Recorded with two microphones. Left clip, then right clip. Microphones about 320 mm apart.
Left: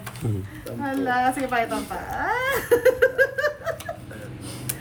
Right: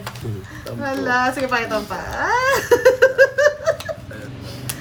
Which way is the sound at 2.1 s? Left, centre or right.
Centre.